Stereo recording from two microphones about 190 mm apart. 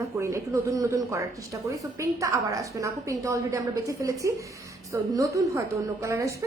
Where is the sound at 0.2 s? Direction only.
15° right (ahead or behind).